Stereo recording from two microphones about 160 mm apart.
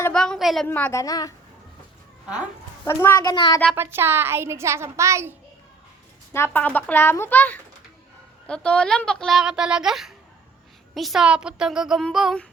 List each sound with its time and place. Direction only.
0.1 s speech: 5° left (ahead or behind)
0.7 s a child's voice: 15° left (ahead or behind)
2.8 s a child's voice: 15° left (ahead or behind)
3.8 s speech: 15° right (ahead or behind)
6.3 s speech: 15° left (ahead or behind)